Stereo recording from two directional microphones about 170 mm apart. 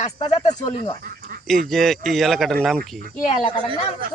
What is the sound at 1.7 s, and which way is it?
Speech, centre (ahead or behind).